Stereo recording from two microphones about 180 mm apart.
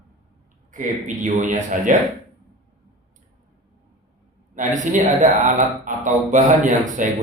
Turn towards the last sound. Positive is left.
turn(degrees=-45)  # may be behind; listen again after turning